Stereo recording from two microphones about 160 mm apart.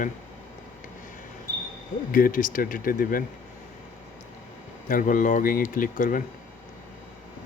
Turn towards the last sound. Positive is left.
turn(degrees=55)  # may be behind; listen again after turning